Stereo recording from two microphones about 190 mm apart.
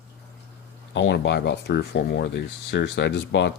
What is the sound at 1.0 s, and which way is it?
Speech, 65° left (ahead or behind).